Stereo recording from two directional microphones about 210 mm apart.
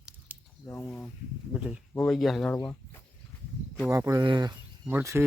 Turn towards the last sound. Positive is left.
turn(degrees=-10)  # may be behind; listen again after turning